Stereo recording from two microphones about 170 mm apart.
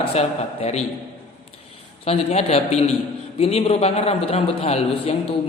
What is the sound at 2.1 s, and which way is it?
A man's voice, 35° left (ahead or behind).